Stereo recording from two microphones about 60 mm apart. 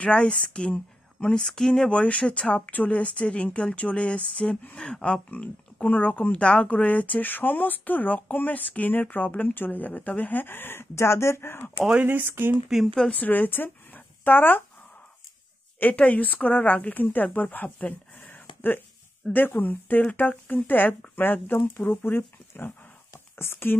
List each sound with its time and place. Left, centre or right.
0.0 s speech: centre
1.9 s speech: left
12.0 s speech: right
12.6 s speech: centre
13.1 s speech: left
15.8 s speech: left